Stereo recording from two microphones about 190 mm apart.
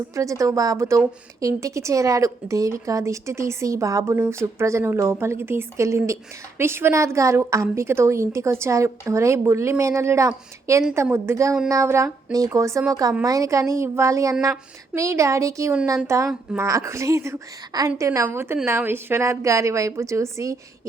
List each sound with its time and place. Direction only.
0.1 s a woman's voice: 15° right (ahead or behind)
16.3 s speech: 5° right (ahead or behind)
16.6 s a woman's voice: 15° right (ahead or behind)